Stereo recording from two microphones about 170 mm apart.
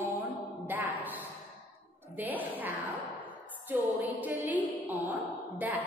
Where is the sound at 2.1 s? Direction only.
10° right (ahead or behind).